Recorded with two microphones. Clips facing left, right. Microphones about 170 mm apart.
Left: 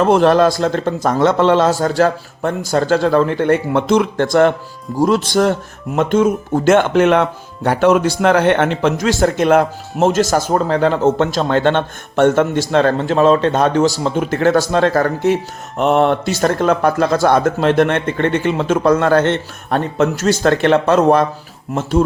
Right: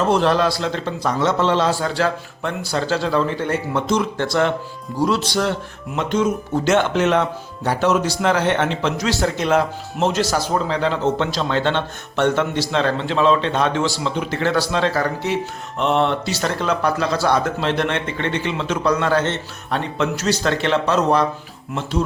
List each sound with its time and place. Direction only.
0.0 s speech: 50° left (ahead or behind)